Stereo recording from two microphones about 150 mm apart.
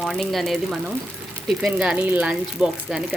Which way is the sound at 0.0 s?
5° left (ahead or behind).